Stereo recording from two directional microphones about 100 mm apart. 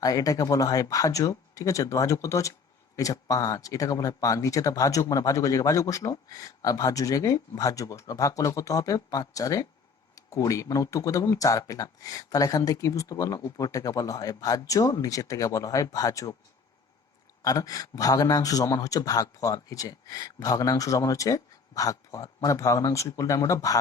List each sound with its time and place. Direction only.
0.0 s speech: 35° left (ahead or behind)
17.4 s speech: 35° left (ahead or behind)